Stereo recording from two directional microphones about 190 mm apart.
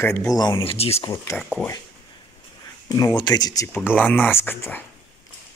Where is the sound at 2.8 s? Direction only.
20° left (ahead or behind).